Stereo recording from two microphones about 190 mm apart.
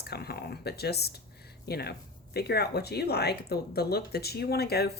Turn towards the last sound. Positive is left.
turn(degrees=55)  # may be behind; listen again after turning